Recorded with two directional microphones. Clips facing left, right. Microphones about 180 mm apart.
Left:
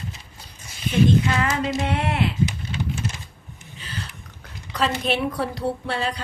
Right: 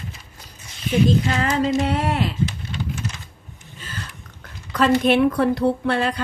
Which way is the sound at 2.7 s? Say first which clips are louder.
Left 1 dB; 15° left (ahead or behind).